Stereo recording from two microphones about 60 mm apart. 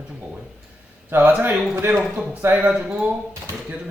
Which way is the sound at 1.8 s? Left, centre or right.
Right.